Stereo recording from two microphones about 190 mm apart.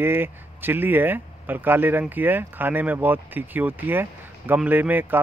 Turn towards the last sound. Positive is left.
turn(degrees=-10)  # may be behind; listen again after turning